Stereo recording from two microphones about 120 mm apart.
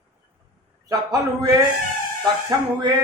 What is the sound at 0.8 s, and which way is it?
A man's voice, 30° right (ahead or behind).